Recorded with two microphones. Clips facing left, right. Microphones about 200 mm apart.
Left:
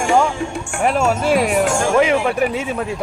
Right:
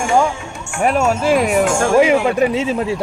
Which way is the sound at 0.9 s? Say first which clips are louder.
Right 2 dB; centre (ahead or behind).